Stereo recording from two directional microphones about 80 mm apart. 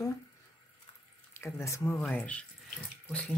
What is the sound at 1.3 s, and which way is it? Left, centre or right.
Speech, left.